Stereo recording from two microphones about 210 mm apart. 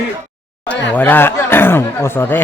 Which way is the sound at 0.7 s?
10° left (ahead or behind).